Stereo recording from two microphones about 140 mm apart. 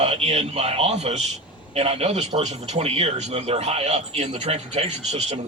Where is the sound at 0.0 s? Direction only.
50° right (ahead or behind).